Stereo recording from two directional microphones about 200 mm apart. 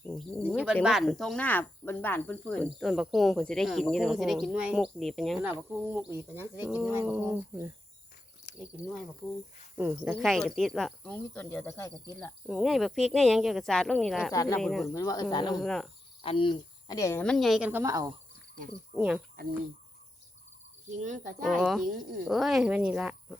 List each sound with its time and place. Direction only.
0.0 s a sound: 5° left (ahead or behind)
0.4 s speech: 5° right (ahead or behind)
8.8 s speech: 5° right (ahead or behind)
10.2 s speech: centre (ahead or behind)
12.5 s speech: centre (ahead or behind)
14.8 s speech: 15° left (ahead or behind)
15.5 s speech: centre (ahead or behind)
16.2 s speech: 25° left (ahead or behind); by 18.1 s 15° right (ahead or behind)
18.9 s speech: 5° right (ahead or behind)
21.0 s speech: 40° right (ahead or behind)
21.6 s speech: centre (ahead or behind)